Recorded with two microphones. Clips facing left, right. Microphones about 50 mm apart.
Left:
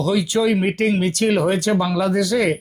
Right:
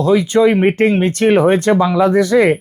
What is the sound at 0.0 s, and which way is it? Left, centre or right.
Speech, right.